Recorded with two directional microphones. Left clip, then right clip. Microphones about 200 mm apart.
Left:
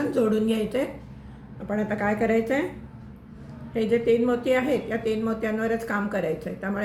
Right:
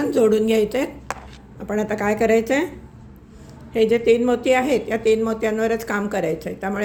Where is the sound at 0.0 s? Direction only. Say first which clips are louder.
Right 6 dB; 45° right (ahead or behind).